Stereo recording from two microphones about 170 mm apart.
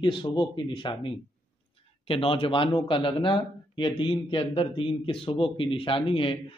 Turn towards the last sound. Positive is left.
turn(degrees=30)  # may be behind; listen again after turning